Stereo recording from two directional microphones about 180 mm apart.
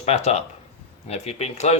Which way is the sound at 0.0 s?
35° left (ahead or behind).